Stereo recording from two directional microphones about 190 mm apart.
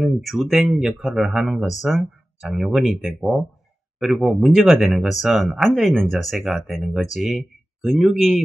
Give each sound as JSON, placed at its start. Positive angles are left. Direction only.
{"t": 0.0, "sound": "speech", "side_deg": 0}